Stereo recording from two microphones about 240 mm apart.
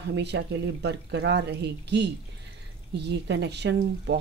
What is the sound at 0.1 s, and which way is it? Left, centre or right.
Speech, right.